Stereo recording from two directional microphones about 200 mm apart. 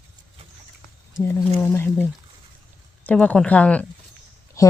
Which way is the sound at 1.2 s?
10° left (ahead or behind).